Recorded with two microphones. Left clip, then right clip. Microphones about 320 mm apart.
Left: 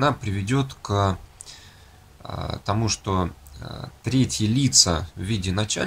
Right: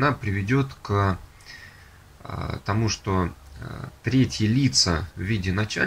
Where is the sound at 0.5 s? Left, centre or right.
Centre.